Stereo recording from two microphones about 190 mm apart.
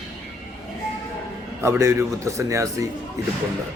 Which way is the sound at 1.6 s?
15° right (ahead or behind).